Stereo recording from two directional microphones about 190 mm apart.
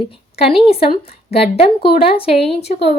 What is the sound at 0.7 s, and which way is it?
A woman's voice, 30° left (ahead or behind).